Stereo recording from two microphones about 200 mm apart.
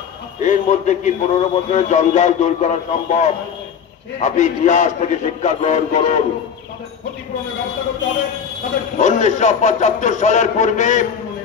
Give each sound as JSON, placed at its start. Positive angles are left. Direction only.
{"t": 0.4, "sound": "a man's voice", "side_deg": 35}
{"t": 8.9, "sound": "a man's voice", "side_deg": 35}